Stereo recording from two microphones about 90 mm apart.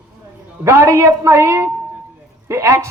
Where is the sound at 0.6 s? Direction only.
30° right (ahead or behind).